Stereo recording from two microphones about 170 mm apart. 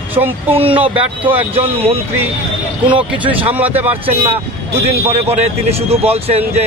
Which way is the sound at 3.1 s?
10° right (ahead or behind).